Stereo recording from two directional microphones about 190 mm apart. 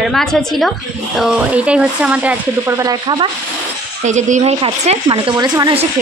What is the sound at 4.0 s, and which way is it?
Speech, 40° right (ahead or behind).